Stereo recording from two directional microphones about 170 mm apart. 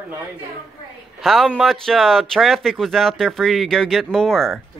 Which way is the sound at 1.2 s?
Centre (ahead or behind).